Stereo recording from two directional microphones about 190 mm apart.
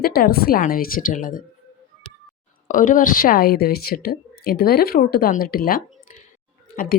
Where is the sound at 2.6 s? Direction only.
45° left (ahead or behind).